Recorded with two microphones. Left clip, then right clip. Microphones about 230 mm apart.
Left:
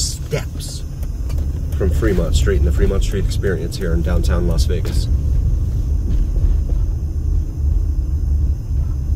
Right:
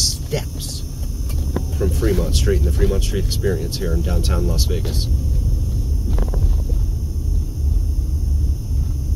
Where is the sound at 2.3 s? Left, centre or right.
Centre.